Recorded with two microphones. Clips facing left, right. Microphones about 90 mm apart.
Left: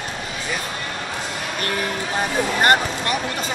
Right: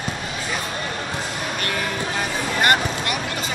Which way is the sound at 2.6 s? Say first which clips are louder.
Left 1 dB; 35° left (ahead or behind).